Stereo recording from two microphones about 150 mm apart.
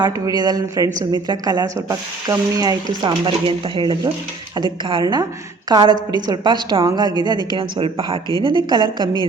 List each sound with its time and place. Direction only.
0.0 s a woman's voice: 25° right (ahead or behind)